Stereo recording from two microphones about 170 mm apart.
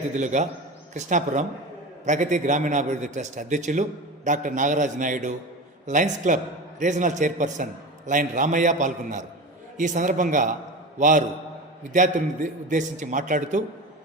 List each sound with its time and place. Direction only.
0.2 s a man's voice: 45° right (ahead or behind)
11.8 s a man's voice: 45° right (ahead or behind)